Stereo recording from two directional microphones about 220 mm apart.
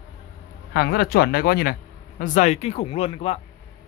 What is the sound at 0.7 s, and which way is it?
Speech, 45° left (ahead or behind).